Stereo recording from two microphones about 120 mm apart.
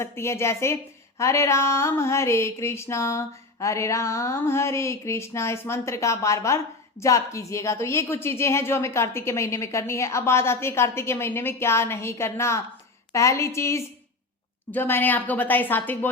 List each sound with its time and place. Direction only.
0.0 s a woman's voice: 20° left (ahead or behind)